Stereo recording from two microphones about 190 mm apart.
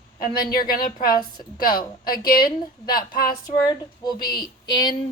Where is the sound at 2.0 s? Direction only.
50° left (ahead or behind).